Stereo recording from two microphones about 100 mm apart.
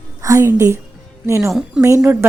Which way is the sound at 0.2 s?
30° right (ahead or behind).